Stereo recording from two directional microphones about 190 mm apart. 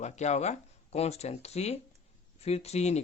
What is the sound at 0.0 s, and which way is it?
Speech, 35° left (ahead or behind).